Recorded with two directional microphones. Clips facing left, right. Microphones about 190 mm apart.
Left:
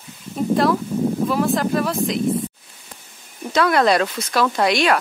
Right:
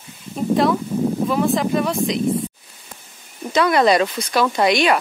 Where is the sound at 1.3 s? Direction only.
Centre (ahead or behind).